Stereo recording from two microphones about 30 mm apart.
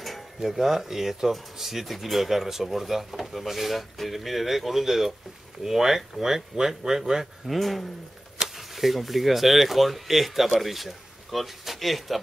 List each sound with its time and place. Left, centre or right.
0.4 s speech: centre
7.4 s speech: centre